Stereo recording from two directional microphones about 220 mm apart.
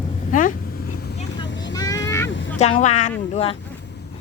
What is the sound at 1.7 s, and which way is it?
Vehicle, 15° left (ahead or behind).